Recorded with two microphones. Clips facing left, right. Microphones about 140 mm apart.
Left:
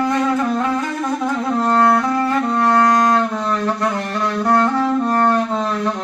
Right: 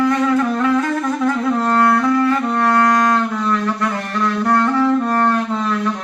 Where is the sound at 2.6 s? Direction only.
25° left (ahead or behind).